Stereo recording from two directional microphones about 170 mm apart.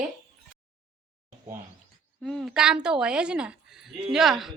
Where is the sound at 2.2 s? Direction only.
Centre (ahead or behind).